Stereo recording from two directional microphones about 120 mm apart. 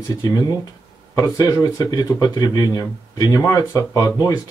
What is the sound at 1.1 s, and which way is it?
Speech, 25° left (ahead or behind).